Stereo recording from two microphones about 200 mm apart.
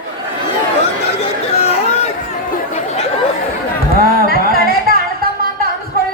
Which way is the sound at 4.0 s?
50° right (ahead or behind).